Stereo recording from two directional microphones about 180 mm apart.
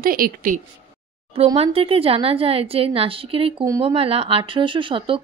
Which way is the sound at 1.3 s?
35° right (ahead or behind).